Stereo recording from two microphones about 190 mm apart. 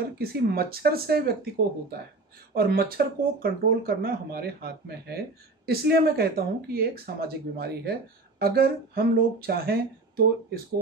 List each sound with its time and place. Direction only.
0.2 s speech: 55° right (ahead or behind)